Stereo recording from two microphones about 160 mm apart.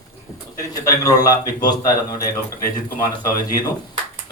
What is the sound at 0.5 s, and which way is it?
A man's voice, 20° left (ahead or behind).